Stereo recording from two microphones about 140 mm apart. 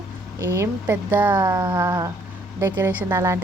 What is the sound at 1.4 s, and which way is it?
A woman's voice, 25° right (ahead or behind).